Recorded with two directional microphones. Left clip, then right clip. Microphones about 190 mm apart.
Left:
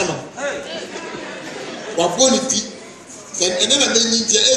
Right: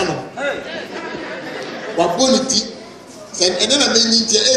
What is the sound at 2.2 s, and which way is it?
A man's voice, 15° right (ahead or behind).